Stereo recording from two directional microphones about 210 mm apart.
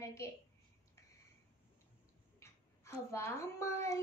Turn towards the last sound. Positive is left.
turn(degrees=15)  # may be behind; listen again after turning